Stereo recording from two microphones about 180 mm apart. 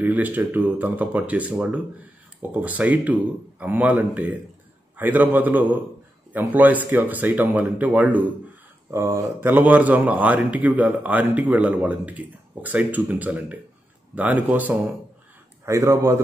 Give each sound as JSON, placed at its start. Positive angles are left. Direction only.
{"t": 0.0, "sound": "a man's voice", "side_deg": -10}